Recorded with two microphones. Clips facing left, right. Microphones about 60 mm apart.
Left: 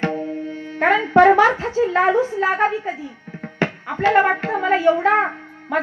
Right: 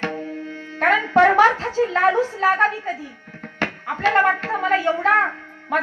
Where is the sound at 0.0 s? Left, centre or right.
Centre.